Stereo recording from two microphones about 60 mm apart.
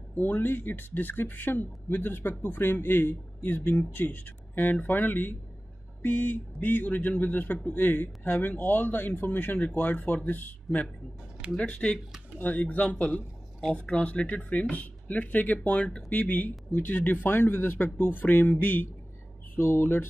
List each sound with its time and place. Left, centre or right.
0.1 s speech: left